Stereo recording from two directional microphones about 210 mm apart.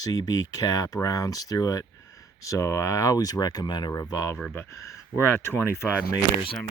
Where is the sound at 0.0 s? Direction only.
20° left (ahead or behind).